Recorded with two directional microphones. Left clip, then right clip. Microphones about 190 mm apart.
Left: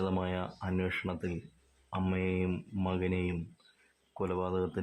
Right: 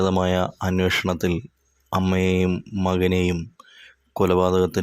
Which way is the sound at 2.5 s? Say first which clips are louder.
Right 12 dB; 30° right (ahead or behind).